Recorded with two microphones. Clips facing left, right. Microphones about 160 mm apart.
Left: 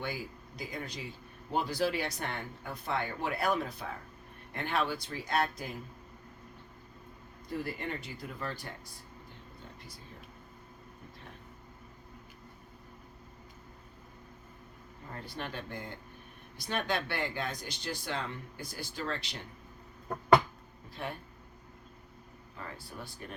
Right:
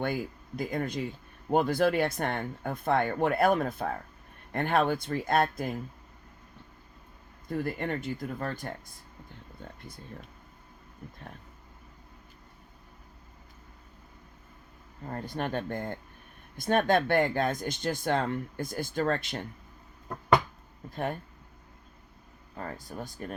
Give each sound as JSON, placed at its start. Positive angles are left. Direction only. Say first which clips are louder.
{"t": 0.0, "sound": "speech", "louder": "right 7 dB", "side_deg": -55}
{"t": 7.6, "sound": "speech", "louder": "right 8 dB", "side_deg": -50}
{"t": 15.0, "sound": "speech", "louder": "right 8 dB", "side_deg": -45}
{"t": 20.9, "sound": "speech", "louder": "right 7 dB", "side_deg": -45}
{"t": 22.5, "sound": "speech", "louder": "right 6 dB", "side_deg": -45}